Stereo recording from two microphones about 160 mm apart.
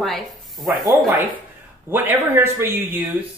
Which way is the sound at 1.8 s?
15° right (ahead or behind).